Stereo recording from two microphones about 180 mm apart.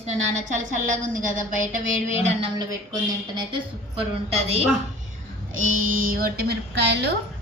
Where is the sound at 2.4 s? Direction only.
20° right (ahead or behind).